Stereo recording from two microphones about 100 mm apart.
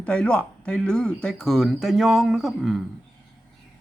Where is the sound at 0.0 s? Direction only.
10° left (ahead or behind).